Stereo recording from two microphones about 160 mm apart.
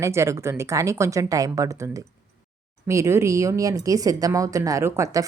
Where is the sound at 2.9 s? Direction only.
20° right (ahead or behind).